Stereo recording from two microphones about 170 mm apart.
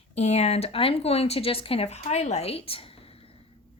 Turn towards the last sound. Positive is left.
turn(degrees=35)  # may be behind; listen again after turning